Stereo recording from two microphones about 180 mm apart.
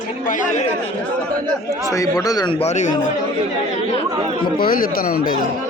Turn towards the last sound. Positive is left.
turn(degrees=50)  # may be behind; listen again after turning